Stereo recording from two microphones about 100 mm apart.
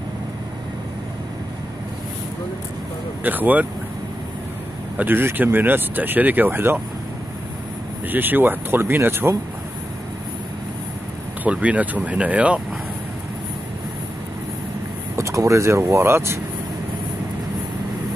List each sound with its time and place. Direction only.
3.3 s speech: 15° right (ahead or behind)
4.9 s speech: 20° right (ahead or behind)
8.1 s speech: 20° right (ahead or behind)
11.4 s speech: 15° right (ahead or behind)
15.1 s speech: 30° right (ahead or behind)